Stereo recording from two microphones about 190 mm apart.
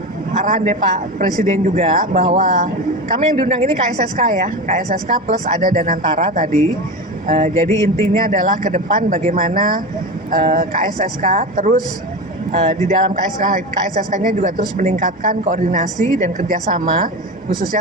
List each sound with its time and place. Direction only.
0.3 s a man's voice: 40° right (ahead or behind)
7.7 s speech: 15° left (ahead or behind)
8.1 s a man's voice: 45° right (ahead or behind)